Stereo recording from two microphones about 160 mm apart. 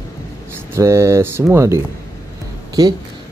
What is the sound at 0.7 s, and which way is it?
Speech, 15° right (ahead or behind).